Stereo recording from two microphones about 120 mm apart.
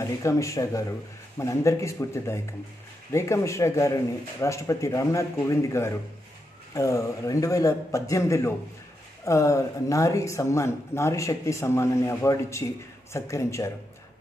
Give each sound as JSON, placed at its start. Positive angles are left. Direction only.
{"t": 0.2, "sound": "speech", "side_deg": 25}